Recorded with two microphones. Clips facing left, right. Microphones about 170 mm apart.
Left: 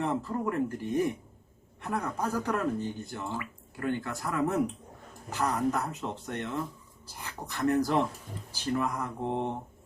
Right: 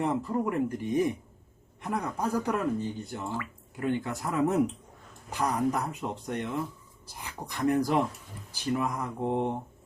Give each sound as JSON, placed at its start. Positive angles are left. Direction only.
{"t": 0.0, "sound": "speech", "side_deg": -15}